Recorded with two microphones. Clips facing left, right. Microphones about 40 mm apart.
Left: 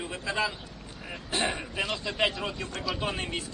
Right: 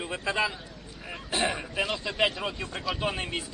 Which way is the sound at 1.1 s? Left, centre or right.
Centre.